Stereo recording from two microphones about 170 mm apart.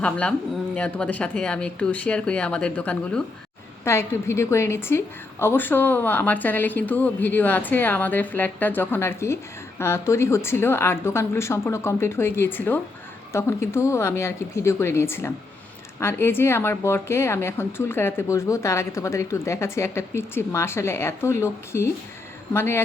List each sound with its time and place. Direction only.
0.0 s a woman's voice: 5° left (ahead or behind)